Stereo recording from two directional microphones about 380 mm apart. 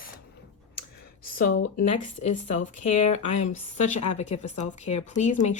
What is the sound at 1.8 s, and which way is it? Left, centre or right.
Speech, centre.